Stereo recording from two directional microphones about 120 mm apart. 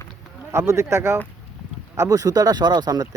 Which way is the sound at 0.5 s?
25° right (ahead or behind).